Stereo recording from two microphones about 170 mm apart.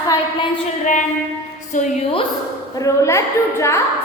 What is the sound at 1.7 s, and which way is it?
Speech, 45° left (ahead or behind).